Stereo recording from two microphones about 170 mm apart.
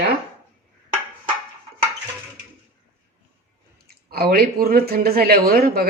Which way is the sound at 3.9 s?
65° right (ahead or behind).